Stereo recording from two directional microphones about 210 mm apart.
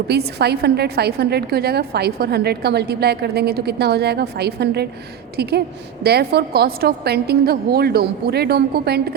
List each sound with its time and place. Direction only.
0.1 s a woman's voice: 50° right (ahead or behind)